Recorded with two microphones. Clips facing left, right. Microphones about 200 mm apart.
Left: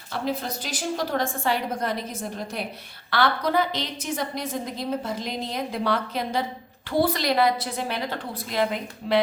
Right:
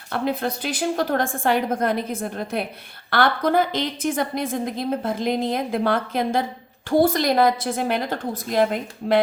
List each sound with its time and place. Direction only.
0.1 s a woman's voice: 60° right (ahead or behind)